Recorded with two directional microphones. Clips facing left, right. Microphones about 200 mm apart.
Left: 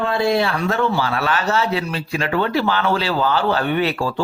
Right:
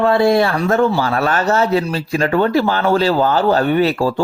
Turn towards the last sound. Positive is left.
turn(degrees=-40)  # may be behind; listen again after turning